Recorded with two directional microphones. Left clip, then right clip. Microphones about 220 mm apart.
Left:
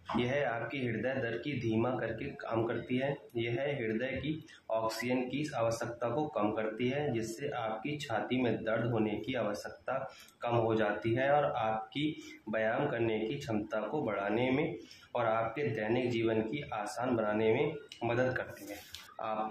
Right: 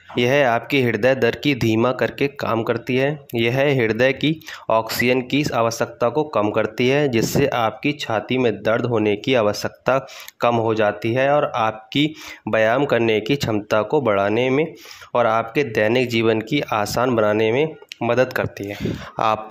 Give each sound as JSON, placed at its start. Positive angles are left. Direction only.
{"t": 0.2, "sound": "speech", "side_deg": -50}